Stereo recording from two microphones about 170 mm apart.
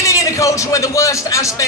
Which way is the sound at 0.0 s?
20° left (ahead or behind).